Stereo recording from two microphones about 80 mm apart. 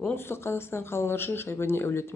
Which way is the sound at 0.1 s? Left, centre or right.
Left.